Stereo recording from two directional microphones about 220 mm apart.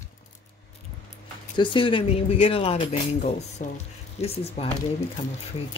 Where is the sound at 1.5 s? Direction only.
20° left (ahead or behind).